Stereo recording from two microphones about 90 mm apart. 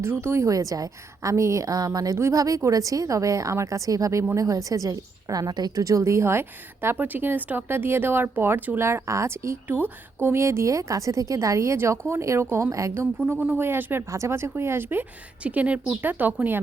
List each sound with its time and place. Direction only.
0.0 s speech: 25° right (ahead or behind)
0.5 s a woman's voice: 40° right (ahead or behind)
5.8 s a woman's voice: 35° right (ahead or behind)
13.5 s speech: 25° right (ahead or behind)